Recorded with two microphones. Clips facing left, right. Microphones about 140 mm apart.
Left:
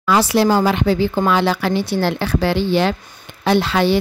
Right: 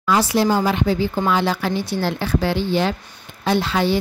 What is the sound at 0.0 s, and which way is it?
A woman's voice, 80° left.